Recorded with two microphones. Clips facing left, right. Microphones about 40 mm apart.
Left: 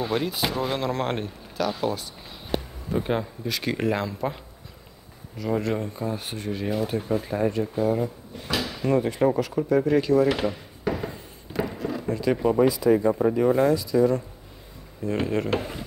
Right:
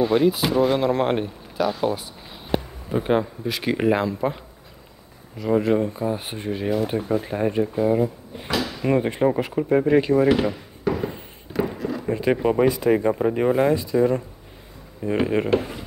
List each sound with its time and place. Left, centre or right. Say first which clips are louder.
0.0 s speech: right 7 dB; centre
5.4 s speech: right 6 dB; centre
6.1 s speech: right 3 dB; right
10.8 s a sound: right 4 dB; centre
12.1 s speech: right 2 dB; right
13.7 s speech: right 1 dB; right
15.5 s speech: right 5 dB; centre